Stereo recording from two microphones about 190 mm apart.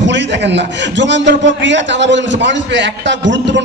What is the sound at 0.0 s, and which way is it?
A man's voice, 65° right (ahead or behind).